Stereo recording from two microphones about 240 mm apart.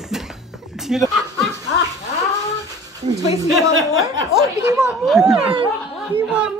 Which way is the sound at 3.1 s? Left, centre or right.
Centre.